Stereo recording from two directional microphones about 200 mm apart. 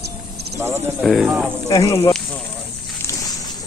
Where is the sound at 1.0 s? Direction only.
Centre (ahead or behind).